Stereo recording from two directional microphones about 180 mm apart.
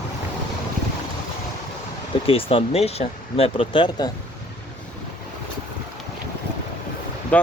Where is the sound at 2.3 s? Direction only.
30° left (ahead or behind).